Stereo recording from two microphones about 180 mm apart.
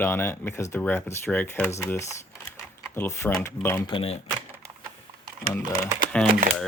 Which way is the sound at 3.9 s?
30° left (ahead or behind).